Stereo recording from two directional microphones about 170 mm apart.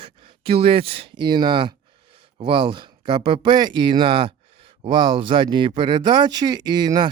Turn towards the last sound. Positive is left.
turn(degrees=-25)  # may be behind; listen again after turning